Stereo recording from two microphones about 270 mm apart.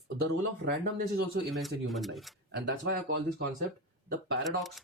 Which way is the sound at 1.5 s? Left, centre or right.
Centre.